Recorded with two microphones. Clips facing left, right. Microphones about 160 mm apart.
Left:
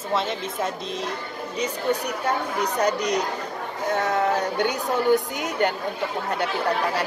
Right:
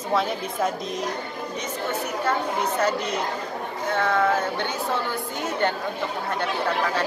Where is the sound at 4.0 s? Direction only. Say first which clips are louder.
Right 1 dB; 40° left (ahead or behind).